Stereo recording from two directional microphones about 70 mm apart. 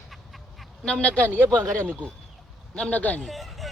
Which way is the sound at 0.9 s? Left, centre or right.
Centre.